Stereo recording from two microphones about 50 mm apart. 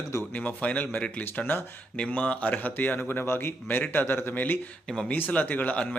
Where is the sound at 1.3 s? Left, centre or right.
Left.